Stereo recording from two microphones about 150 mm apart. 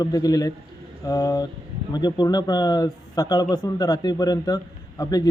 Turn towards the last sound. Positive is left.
turn(degrees=25)  # may be behind; listen again after turning